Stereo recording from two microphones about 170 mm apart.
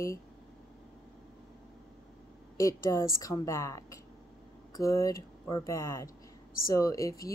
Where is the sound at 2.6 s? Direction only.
20° left (ahead or behind).